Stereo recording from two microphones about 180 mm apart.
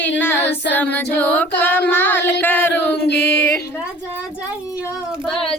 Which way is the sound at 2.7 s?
70° left (ahead or behind).